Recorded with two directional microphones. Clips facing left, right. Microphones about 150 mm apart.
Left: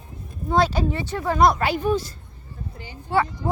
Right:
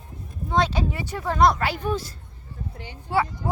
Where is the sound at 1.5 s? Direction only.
15° left (ahead or behind).